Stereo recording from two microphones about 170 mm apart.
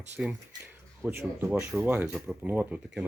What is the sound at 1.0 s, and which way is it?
Speech, 15° right (ahead or behind).